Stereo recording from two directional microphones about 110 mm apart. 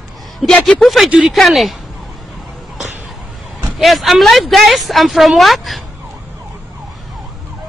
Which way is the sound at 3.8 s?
Centre (ahead or behind).